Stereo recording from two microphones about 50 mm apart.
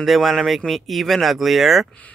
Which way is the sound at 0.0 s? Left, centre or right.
Centre.